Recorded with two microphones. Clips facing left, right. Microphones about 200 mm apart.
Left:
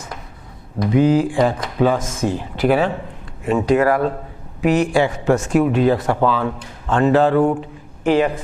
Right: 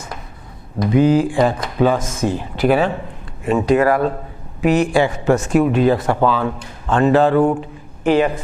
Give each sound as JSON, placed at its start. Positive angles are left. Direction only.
{"t": 0.8, "sound": "speech", "side_deg": -20}